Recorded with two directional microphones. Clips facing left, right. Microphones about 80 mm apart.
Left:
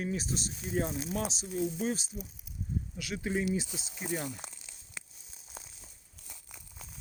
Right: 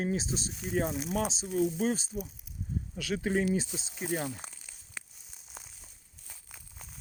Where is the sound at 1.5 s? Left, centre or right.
Right.